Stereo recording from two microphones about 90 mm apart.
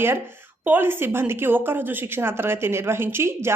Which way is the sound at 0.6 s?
20° right (ahead or behind).